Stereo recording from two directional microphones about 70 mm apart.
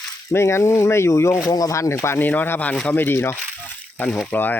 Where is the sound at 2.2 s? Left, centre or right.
Left.